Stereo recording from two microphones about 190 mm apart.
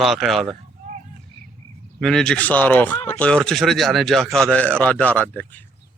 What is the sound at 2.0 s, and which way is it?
Speech, 5° left (ahead or behind).